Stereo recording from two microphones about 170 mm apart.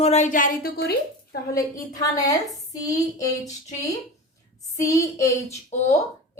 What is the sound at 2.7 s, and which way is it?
Speech, 20° left (ahead or behind).